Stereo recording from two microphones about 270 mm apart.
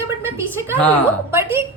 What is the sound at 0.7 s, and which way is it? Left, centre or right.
Speech, centre.